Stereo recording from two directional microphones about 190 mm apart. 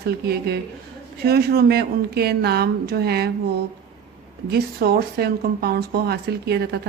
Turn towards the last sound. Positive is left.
turn(degrees=-60)  # may be behind; listen again after turning